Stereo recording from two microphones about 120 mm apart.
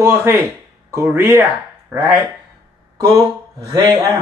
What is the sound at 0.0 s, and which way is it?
Speech, 25° right (ahead or behind).